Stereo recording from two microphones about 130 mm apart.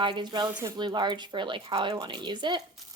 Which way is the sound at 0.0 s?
35° right (ahead or behind).